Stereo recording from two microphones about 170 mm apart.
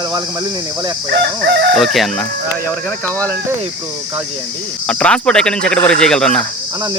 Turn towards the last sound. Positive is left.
turn(degrees=5)  # may be behind; listen again after turning